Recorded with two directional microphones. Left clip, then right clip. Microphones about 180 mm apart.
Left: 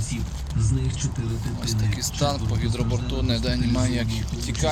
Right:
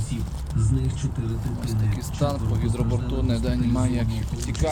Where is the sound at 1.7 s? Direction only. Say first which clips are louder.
Left 4 dB; 10° right (ahead or behind).